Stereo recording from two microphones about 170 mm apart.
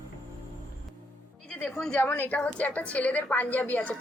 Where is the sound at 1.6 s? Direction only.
5° left (ahead or behind).